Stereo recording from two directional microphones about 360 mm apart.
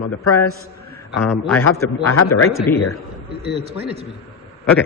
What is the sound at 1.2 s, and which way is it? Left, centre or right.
Speech, centre.